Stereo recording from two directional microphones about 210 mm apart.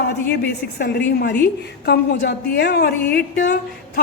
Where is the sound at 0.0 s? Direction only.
50° left (ahead or behind).